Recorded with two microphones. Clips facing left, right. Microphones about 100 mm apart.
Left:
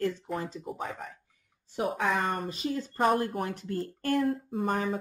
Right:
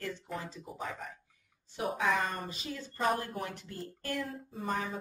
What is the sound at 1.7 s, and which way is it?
Speech, 45° left (ahead or behind).